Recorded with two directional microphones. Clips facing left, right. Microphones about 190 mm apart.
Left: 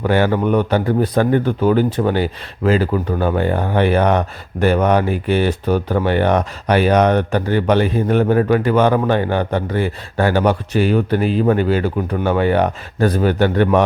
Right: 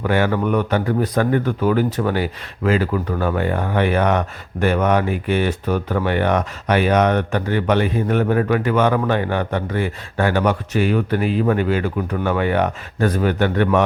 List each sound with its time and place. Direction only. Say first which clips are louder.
0.0 s a man's voice: left 3 dB; 30° left (ahead or behind)